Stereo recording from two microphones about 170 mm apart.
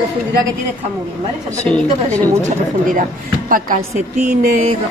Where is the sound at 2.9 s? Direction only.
55° right (ahead or behind).